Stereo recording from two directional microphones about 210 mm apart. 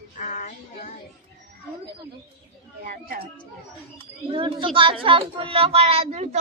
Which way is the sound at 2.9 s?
45° right (ahead or behind).